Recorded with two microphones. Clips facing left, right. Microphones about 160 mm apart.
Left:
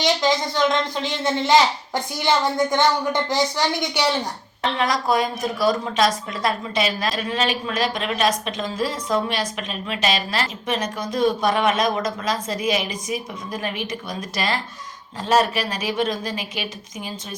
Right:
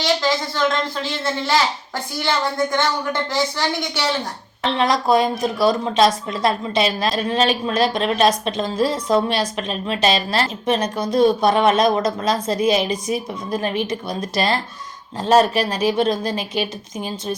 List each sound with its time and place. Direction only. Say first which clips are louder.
0.0 s speech: even; 20° left (ahead or behind)
4.6 s speech: right 3 dB; 25° right (ahead or behind)